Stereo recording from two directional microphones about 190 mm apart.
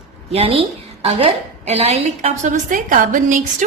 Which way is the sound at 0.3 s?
30° right (ahead or behind).